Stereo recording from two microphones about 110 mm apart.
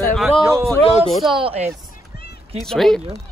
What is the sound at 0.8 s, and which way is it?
Speech, 65° left (ahead or behind).